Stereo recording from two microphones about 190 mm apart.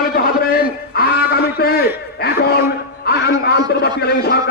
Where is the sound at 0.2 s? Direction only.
50° left (ahead or behind).